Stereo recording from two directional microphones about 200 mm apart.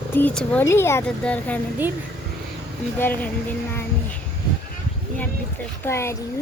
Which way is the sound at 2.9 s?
10° left (ahead or behind).